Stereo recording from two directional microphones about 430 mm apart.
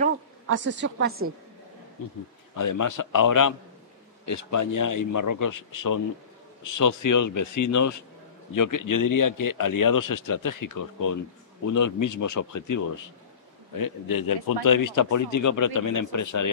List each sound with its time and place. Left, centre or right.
0.6 s a woman's voice: right
2.5 s speech: left